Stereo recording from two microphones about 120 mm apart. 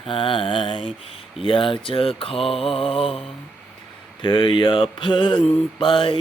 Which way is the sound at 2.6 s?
50° left (ahead or behind).